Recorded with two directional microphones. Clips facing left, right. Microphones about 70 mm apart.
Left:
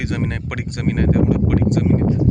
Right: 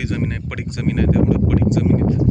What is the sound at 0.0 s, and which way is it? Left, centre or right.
Speech, left.